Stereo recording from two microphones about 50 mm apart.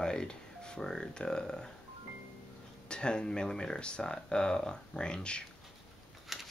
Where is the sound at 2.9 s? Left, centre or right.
Centre.